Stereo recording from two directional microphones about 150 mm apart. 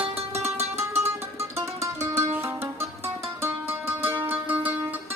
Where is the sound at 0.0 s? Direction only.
40° right (ahead or behind).